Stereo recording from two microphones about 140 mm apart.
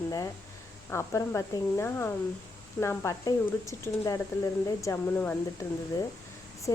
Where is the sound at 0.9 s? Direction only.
20° left (ahead or behind).